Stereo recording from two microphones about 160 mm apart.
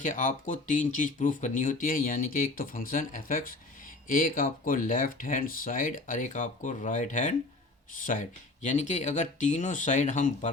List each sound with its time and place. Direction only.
0.0 s speech: 50° left (ahead or behind)
8.6 s speech: 45° left (ahead or behind)